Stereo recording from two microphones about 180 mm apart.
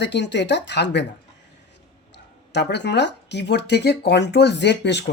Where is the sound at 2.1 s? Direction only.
70° left (ahead or behind).